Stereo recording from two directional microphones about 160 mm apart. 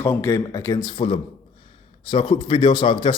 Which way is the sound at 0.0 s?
15° left (ahead or behind).